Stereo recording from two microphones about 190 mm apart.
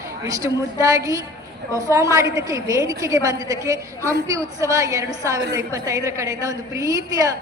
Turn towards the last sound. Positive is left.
turn(degrees=-20)  # may be behind; listen again after turning